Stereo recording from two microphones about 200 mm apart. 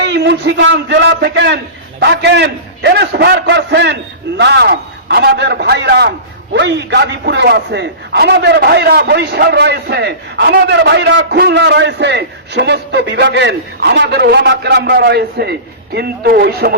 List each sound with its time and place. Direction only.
0.0 s a man's voice: 60° right (ahead or behind)